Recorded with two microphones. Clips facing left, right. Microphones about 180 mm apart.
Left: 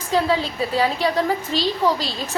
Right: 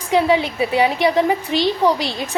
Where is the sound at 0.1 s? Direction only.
15° right (ahead or behind).